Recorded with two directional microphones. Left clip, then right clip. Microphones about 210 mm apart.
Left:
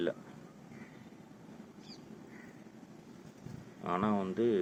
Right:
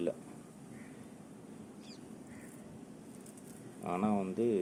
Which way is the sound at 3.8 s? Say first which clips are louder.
Left 2 dB; 10° right (ahead or behind).